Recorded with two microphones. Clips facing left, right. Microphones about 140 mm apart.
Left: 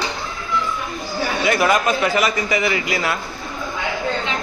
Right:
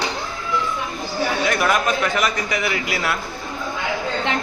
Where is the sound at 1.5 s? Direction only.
Centre (ahead or behind).